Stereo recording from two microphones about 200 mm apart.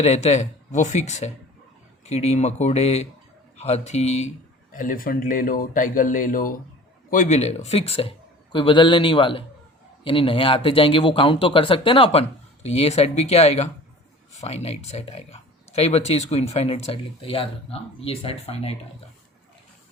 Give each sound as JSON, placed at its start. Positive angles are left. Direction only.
{"t": 0.0, "sound": "speech", "side_deg": 35}